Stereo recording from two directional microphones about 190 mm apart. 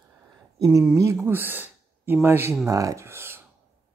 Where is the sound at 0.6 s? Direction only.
20° right (ahead or behind).